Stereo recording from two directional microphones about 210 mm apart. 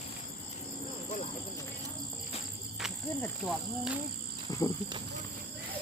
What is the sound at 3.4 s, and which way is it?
Speech, 5° right (ahead or behind).